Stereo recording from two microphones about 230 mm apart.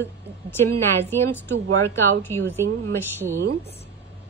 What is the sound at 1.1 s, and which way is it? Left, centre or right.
A woman's voice, centre.